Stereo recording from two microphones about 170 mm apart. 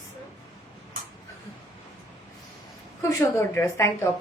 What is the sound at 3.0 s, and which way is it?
A woman's voice, 20° left (ahead or behind).